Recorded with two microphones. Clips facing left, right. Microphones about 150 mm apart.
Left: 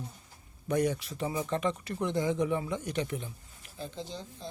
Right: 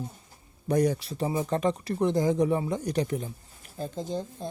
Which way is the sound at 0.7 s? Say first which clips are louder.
Right 4 dB; 35° right (ahead or behind).